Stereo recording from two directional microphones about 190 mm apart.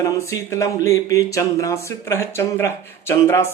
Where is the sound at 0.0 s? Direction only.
15° left (ahead or behind).